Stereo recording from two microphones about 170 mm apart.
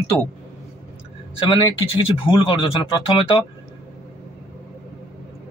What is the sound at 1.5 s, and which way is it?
Speech, 30° left (ahead or behind).